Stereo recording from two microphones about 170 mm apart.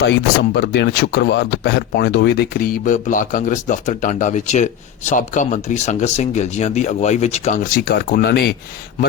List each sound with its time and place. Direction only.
0.5 s speech: 85° left; by 8.5 s 70° left (ahead or behind)